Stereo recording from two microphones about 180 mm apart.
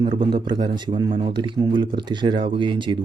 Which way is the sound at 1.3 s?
25° right (ahead or behind).